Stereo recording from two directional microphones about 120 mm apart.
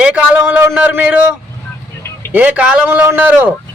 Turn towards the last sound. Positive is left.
turn(degrees=-15)  # may be behind; listen again after turning